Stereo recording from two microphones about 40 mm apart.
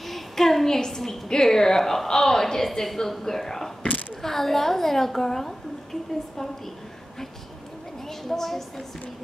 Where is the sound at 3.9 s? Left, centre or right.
Left.